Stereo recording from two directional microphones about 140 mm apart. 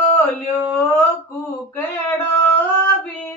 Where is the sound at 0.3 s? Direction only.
15° left (ahead or behind).